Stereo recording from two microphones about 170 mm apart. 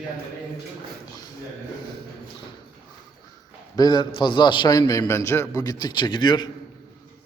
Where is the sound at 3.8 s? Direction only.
25° left (ahead or behind).